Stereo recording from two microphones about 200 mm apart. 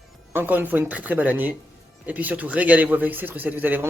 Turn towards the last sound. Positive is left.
turn(degrees=-10)  # may be behind; listen again after turning